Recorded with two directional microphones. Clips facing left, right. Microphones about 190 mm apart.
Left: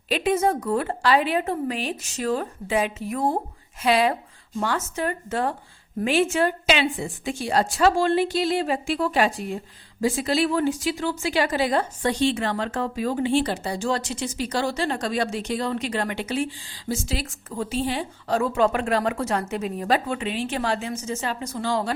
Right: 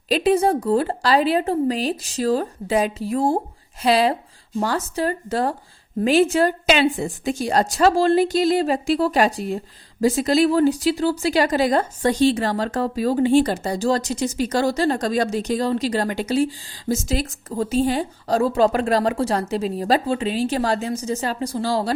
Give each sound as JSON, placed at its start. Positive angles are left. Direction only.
{"t": 0.1, "sound": "a woman's voice", "side_deg": -35}